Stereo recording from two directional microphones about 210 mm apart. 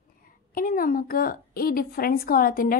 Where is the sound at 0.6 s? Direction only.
40° left (ahead or behind).